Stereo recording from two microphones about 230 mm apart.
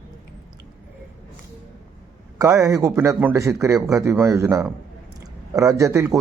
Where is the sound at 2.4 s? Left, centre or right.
Centre.